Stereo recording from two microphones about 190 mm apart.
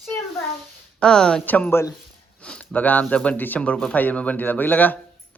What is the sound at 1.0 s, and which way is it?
Speech, 5° left (ahead or behind).